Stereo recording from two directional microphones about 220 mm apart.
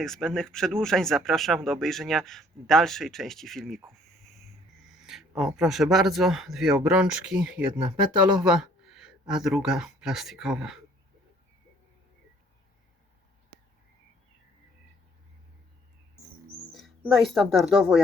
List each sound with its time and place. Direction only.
0.0 s speech: centre (ahead or behind)
5.0 s speech: centre (ahead or behind)
16.7 s speech: centre (ahead or behind)